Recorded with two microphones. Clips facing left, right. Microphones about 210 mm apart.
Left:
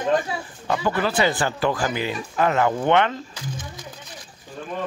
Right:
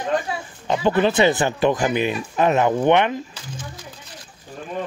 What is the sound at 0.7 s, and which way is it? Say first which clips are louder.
Speech: right 5 dB; 20° right (ahead or behind).